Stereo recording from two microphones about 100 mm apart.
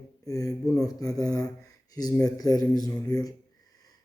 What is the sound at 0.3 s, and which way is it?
Speech, 35° left (ahead or behind).